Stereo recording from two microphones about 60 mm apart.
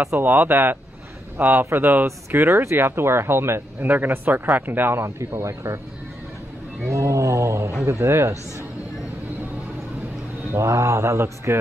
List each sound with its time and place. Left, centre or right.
0.2 s a man's voice: right
3.8 s a man's voice: right
5.4 s speech: right
6.9 s speech: right
10.7 s speech: right